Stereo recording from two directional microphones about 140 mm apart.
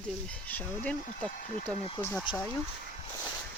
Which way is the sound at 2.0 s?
15° left (ahead or behind).